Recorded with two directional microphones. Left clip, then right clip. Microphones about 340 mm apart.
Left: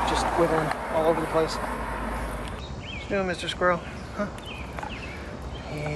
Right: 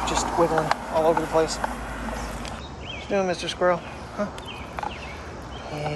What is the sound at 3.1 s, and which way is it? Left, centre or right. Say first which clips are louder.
Speech: right 3 dB; centre.